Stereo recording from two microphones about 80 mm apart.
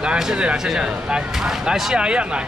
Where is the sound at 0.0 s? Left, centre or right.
Centre.